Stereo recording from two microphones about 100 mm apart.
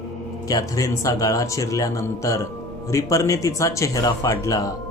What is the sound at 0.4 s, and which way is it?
Speech, 35° left (ahead or behind).